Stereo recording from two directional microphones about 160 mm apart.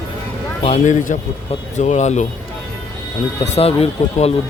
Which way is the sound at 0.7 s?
50° left (ahead or behind).